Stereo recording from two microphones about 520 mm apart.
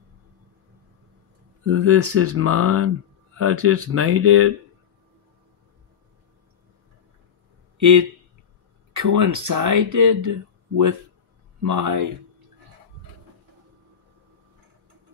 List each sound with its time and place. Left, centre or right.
1.7 s speech: right
8.9 s speech: right